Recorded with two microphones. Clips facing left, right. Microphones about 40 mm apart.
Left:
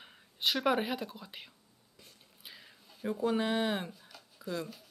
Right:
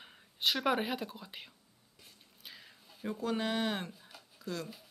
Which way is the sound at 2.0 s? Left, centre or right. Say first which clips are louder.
Even; centre.